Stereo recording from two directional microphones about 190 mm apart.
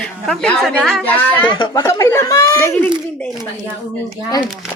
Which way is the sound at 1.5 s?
25° left (ahead or behind).